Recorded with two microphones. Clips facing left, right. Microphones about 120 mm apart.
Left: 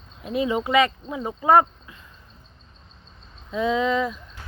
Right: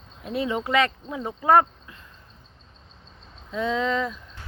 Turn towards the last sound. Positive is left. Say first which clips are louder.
# left 3 dB
turn(degrees=10)  # may be behind; listen again after turning